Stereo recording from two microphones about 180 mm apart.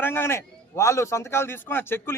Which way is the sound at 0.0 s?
10° left (ahead or behind).